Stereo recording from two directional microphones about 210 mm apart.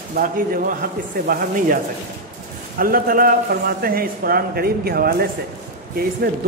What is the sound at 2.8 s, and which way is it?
A man's voice, 45° right (ahead or behind).